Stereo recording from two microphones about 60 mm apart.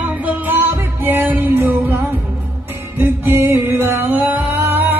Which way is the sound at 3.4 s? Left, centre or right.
Right.